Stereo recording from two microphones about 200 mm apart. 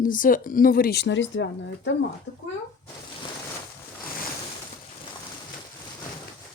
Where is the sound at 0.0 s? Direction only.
45° left (ahead or behind); by 2.0 s 65° left (ahead or behind).